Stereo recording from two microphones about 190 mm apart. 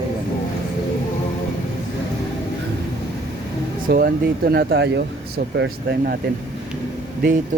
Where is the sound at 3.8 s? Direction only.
50° right (ahead or behind).